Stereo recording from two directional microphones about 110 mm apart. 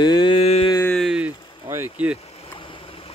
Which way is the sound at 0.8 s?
5° left (ahead or behind).